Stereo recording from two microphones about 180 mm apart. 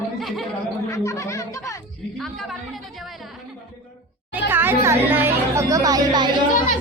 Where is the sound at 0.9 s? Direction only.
15° left (ahead or behind).